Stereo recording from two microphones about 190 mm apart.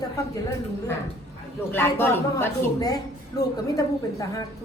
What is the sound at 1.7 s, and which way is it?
A woman's voice, 10° left (ahead or behind).